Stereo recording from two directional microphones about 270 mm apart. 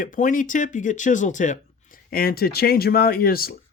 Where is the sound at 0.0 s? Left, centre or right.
Left.